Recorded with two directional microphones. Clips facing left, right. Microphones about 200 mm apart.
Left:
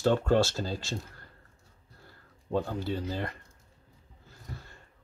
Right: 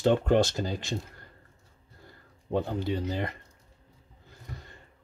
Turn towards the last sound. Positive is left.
turn(degrees=-20)  # may be behind; listen again after turning